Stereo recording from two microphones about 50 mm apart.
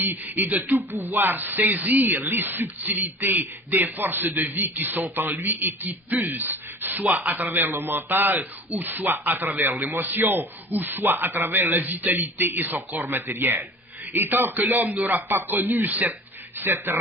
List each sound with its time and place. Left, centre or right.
0.0 s speech: right